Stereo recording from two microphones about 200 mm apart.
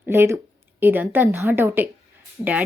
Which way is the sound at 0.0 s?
10° right (ahead or behind).